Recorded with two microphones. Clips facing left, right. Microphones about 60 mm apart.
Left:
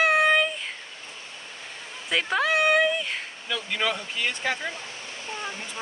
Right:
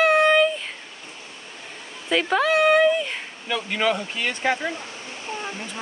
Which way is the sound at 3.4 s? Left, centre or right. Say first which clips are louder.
Right 5 dB; right.